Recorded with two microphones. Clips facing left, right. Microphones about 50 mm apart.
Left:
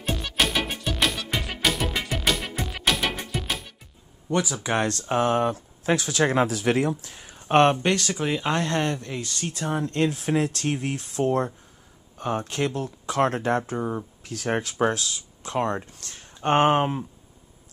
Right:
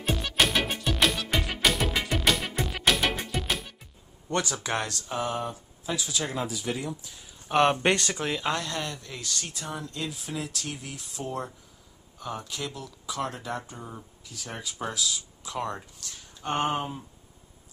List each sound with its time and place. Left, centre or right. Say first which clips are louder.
0.0 s music: even; centre
4.3 s speech: left 4 dB; centre
4.8 s speech: left 8 dB; left
7.8 s speech: left 1 dB; centre
8.2 s speech: left 4 dB; centre
8.5 s speech: left 8 dB; left
9.5 s speech: left 9 dB; left